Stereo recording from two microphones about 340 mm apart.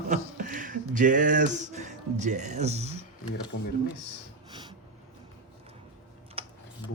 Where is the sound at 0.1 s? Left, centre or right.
Right.